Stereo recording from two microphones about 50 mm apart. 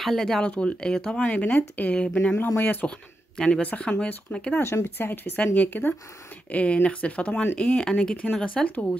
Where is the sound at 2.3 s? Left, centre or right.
Left.